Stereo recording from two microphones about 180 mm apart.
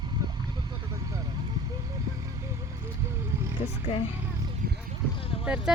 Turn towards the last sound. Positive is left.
turn(degrees=-5)  # may be behind; listen again after turning